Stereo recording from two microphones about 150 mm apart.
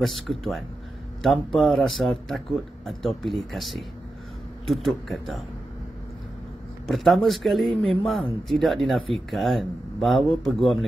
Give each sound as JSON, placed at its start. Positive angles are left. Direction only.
{"t": 0.0, "sound": "speech", "side_deg": 0}
{"t": 6.9, "sound": "speech", "side_deg": 0}